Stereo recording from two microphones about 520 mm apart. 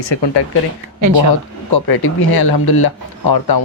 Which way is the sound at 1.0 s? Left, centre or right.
Right.